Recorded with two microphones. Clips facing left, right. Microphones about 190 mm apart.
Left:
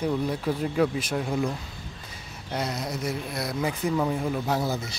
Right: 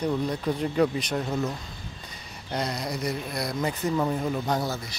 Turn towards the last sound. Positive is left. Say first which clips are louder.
# even
turn(degrees=5)  # may be behind; listen again after turning